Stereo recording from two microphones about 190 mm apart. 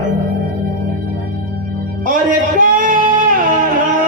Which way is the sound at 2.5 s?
45° right (ahead or behind).